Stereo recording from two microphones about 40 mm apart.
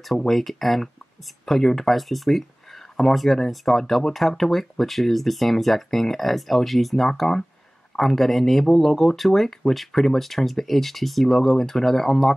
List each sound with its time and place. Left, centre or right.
0.3 s speech: centre
7.1 s speech: centre